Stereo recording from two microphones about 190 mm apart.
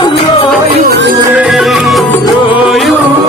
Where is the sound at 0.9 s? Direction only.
70° right (ahead or behind).